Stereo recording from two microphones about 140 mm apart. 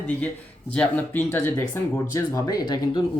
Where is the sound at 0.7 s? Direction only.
10° left (ahead or behind).